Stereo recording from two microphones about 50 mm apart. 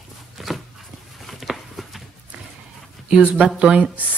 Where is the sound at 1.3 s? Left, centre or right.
Centre.